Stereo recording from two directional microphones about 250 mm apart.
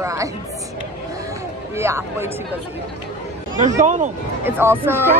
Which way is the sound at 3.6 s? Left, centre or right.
Right.